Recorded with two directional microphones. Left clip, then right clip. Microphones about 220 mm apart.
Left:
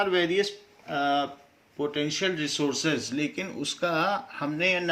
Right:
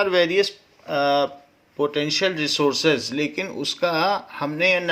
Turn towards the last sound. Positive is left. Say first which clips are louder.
# right 6 dB
turn(degrees=-35)  # may be behind; listen again after turning